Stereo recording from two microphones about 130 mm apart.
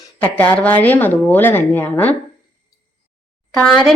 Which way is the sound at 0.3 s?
10° left (ahead or behind).